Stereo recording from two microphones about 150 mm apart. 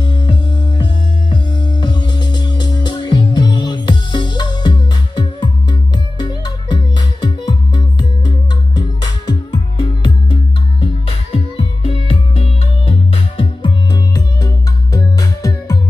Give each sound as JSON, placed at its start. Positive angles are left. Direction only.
{"t": 0.0, "sound": "music", "side_deg": 30}
{"t": 10.8, "sound": "music", "side_deg": 35}